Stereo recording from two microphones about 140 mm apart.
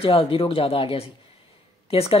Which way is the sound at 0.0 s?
40° left (ahead or behind).